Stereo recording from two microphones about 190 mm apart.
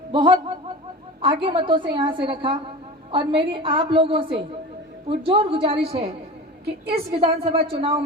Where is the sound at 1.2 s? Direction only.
25° right (ahead or behind).